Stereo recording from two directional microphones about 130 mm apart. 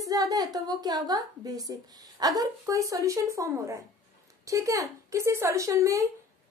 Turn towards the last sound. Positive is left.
turn(degrees=-25)  # may be behind; listen again after turning